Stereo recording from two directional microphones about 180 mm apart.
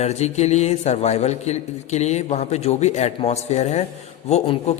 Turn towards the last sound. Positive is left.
turn(degrees=35)  # may be behind; listen again after turning